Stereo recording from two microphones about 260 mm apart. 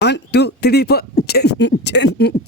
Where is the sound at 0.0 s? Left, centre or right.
Left.